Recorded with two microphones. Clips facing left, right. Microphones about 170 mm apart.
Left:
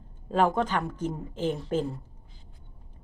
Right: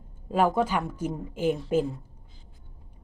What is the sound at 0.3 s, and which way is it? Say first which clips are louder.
Speech: right 1 dB; 10° right (ahead or behind).